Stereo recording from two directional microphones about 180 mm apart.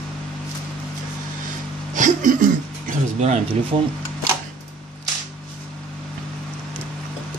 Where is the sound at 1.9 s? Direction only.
45° right (ahead or behind).